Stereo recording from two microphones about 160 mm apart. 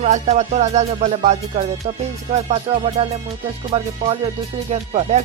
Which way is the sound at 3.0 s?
40° right (ahead or behind).